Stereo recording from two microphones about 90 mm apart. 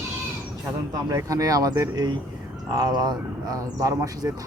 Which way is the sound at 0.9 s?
40° right (ahead or behind).